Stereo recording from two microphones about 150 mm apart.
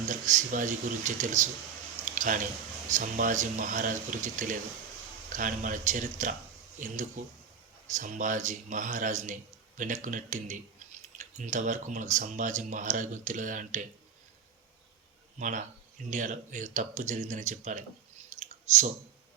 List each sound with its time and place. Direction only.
0.1 s a man's voice: 55° right (ahead or behind)
2.0 s a sound: 60° right (ahead or behind)
2.9 s a man's voice: 60° right (ahead or behind)
15.4 s a man's voice: 55° right (ahead or behind)
18.3 s clicking: 50° right (ahead or behind)